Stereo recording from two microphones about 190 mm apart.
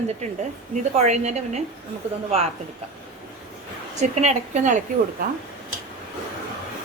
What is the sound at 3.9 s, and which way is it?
Speech, 35° right (ahead or behind).